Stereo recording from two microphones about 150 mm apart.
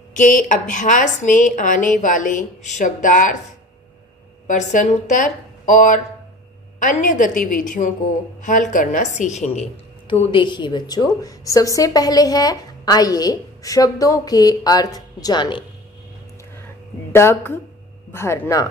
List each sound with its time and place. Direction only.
0.1 s a woman's voice: 60° left (ahead or behind)
4.5 s a woman's voice: 55° left (ahead or behind)
10.0 s a woman's voice: 30° left (ahead or behind)
16.5 s a sound: 15° left (ahead or behind)
18.1 s speech: 15° left (ahead or behind)